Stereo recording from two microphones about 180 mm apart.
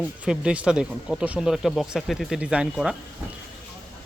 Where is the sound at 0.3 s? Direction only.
5° right (ahead or behind).